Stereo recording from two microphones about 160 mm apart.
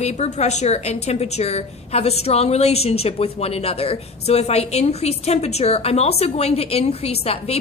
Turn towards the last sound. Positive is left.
turn(degrees=40)  # may be behind; listen again after turning